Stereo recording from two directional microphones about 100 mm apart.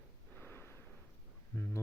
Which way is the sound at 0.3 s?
20° left (ahead or behind).